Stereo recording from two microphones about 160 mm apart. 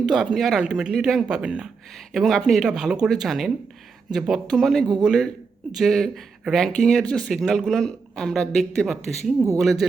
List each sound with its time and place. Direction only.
0.0 s speech: 5° right (ahead or behind)